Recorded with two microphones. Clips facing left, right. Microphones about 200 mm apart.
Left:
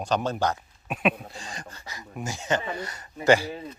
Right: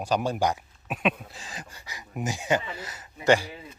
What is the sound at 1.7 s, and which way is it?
Speech, 15° right (ahead or behind).